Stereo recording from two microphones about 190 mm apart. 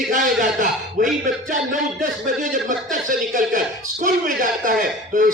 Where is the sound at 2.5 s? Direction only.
45° right (ahead or behind).